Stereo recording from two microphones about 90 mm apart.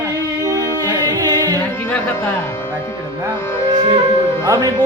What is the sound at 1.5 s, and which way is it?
Music, 20° left (ahead or behind).